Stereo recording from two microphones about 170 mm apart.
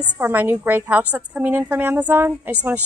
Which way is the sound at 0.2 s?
10° right (ahead or behind).